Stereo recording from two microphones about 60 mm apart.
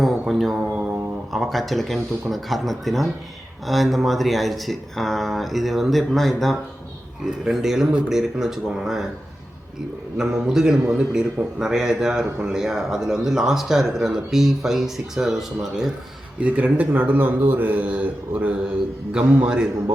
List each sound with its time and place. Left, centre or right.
0.0 s mantra: centre
1.3 s speech: centre
10.2 s speech: centre
16.4 s a man's voice: right